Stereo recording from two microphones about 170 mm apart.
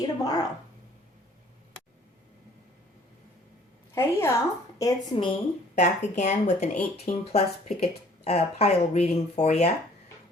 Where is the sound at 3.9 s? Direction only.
15° left (ahead or behind).